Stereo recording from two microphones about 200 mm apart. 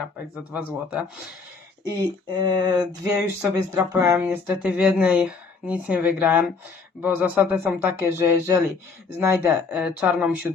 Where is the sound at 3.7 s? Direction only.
15° right (ahead or behind).